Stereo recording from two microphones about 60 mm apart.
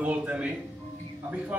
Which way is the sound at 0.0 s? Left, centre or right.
Right.